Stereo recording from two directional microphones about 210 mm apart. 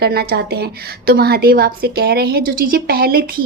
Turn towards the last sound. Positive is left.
turn(degrees=-45)  # may be behind; listen again after turning